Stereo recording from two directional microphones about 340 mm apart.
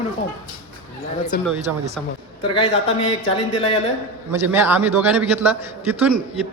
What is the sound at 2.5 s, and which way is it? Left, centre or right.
Speech, centre.